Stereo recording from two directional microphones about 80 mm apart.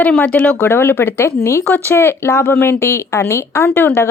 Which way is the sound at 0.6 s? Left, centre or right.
Left.